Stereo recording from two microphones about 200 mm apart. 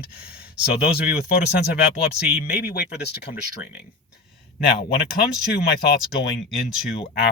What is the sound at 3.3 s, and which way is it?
Speech, 30° left (ahead or behind).